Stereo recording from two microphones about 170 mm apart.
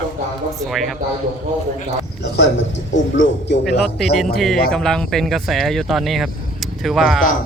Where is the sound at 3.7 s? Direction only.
Centre (ahead or behind).